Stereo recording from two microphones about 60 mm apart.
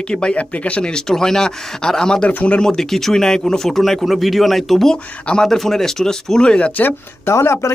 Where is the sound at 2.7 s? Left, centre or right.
Centre.